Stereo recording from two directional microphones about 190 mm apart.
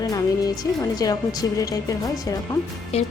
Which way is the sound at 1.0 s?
20° left (ahead or behind).